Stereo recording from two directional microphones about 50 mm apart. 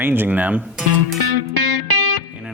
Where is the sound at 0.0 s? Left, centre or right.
Right.